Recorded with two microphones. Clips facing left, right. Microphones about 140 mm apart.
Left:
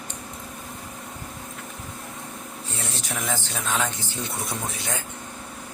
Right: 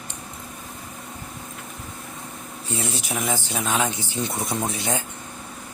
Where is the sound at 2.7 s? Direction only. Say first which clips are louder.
Right 5 dB; 10° right (ahead or behind).